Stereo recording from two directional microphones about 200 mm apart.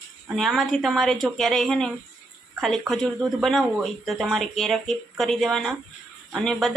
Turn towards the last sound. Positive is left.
turn(degrees=0)  # may be behind; listen again after turning